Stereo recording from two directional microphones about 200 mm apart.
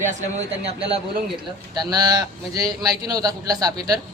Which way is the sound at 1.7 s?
20° right (ahead or behind).